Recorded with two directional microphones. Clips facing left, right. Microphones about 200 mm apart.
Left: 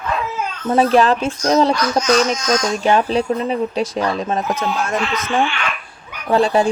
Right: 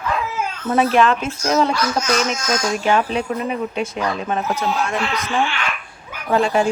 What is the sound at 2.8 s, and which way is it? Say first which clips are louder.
Speech: left 4 dB; 35° left (ahead or behind).